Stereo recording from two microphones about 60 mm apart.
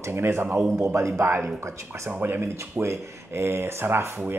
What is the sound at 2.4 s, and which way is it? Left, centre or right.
A man's voice, right.